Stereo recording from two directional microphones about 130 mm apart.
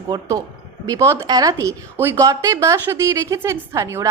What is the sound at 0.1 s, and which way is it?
A woman's voice, 30° right (ahead or behind).